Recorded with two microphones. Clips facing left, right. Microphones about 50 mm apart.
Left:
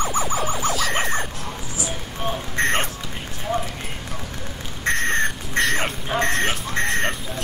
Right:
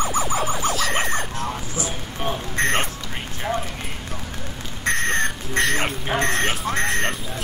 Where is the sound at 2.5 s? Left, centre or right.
Centre.